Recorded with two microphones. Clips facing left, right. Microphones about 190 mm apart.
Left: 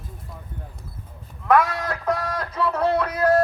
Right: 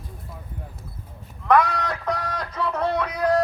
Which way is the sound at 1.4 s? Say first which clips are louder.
Even; 5° left (ahead or behind).